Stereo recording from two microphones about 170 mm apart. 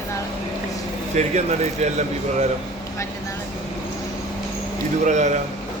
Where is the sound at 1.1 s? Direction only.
40° right (ahead or behind).